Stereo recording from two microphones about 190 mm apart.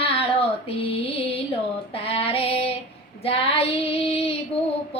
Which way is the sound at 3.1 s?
30° left (ahead or behind).